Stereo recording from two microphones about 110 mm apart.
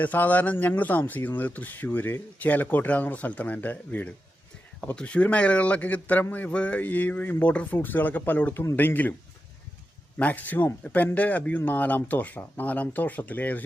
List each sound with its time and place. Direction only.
0.0 s speech: 15° left (ahead or behind)
10.2 s speech: 15° left (ahead or behind)